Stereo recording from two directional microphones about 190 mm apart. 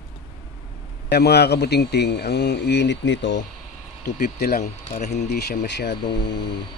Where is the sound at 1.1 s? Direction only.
60° left (ahead or behind).